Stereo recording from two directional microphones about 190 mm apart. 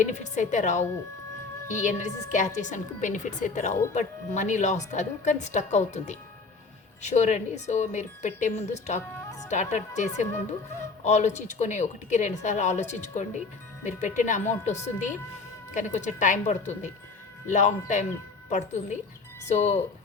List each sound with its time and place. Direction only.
0.0 s speech: 40° left (ahead or behind)